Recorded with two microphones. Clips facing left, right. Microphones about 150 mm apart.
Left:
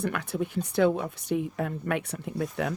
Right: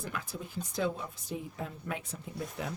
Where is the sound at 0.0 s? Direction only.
70° left (ahead or behind).